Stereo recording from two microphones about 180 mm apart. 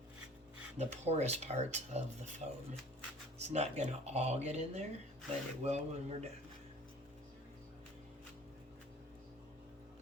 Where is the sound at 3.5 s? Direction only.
40° right (ahead or behind).